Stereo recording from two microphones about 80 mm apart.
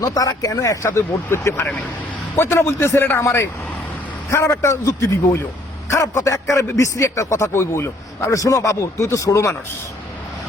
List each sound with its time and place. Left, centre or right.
0.0 s a man's voice: left
0.5 s a man's voice: left